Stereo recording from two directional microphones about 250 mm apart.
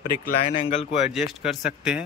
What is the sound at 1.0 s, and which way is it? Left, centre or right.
Speech, centre.